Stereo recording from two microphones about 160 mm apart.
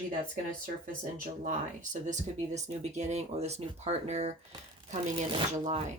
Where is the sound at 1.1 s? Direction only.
55° right (ahead or behind).